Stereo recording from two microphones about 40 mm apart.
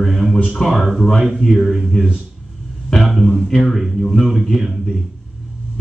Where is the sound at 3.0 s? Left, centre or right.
Centre.